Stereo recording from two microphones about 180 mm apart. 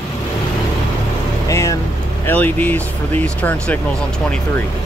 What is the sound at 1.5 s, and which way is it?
Speech, 15° left (ahead or behind).